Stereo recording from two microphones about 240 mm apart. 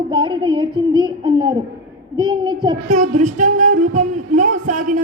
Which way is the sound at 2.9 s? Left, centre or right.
Right.